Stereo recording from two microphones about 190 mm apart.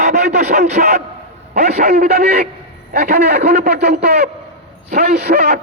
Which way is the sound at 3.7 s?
60° right (ahead or behind).